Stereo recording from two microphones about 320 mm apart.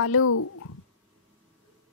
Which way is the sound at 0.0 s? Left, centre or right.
Left.